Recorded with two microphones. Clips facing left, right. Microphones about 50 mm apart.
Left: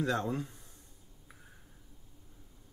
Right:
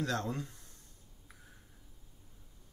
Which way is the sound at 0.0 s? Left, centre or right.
Centre.